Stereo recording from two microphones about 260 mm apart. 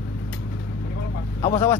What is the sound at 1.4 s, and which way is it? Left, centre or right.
Speech, centre.